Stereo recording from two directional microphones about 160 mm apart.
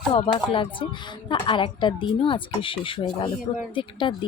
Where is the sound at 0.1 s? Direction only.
30° left (ahead or behind).